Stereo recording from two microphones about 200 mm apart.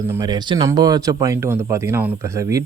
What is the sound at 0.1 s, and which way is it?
Speech, 20° right (ahead or behind).